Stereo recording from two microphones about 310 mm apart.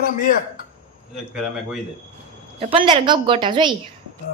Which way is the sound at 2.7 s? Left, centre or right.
Centre.